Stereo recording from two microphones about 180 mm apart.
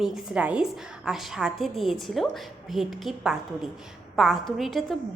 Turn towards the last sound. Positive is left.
turn(degrees=0)  # may be behind; listen again after turning